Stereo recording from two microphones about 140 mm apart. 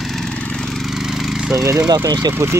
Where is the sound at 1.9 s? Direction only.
30° right (ahead or behind).